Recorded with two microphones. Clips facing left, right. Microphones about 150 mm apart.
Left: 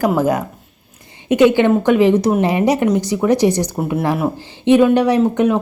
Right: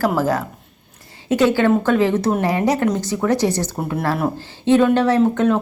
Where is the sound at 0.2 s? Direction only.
20° left (ahead or behind).